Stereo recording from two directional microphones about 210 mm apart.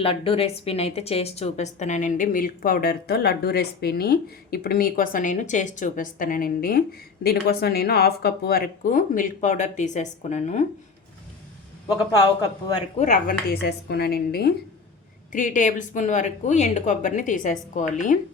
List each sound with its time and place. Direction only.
0.0 s a woman's voice: 25° left (ahead or behind)
13.0 s a woman's voice: 40° left (ahead or behind)
13.5 s a woman's voice: 50° left (ahead or behind)